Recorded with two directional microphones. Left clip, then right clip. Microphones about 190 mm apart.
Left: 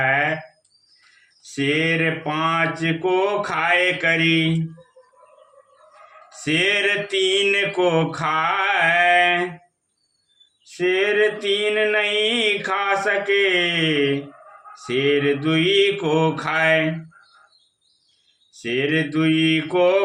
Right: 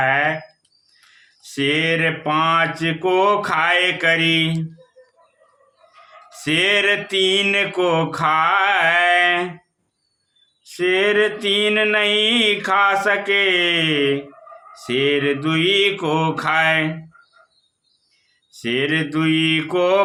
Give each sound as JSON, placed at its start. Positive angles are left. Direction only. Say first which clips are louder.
{"t": 0.0, "sound": "a sound", "louder": "right 2 dB", "side_deg": -25}
{"t": 1.4, "sound": "mantra", "louder": "right 2 dB", "side_deg": -25}
{"t": 6.3, "sound": "mantra", "louder": "right 2 dB", "side_deg": -25}
{"t": 10.7, "sound": "mantra", "louder": "right 2 dB", "side_deg": -30}
{"t": 18.6, "sound": "mantra", "louder": "right 1 dB", "side_deg": -25}